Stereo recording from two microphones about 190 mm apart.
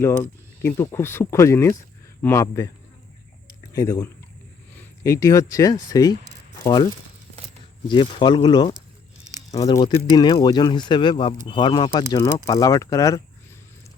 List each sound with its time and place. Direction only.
0.0 s speech: 10° left (ahead or behind)
7.9 s speech: 25° left (ahead or behind)